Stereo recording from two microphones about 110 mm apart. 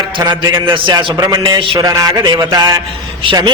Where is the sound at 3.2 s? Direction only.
45° right (ahead or behind).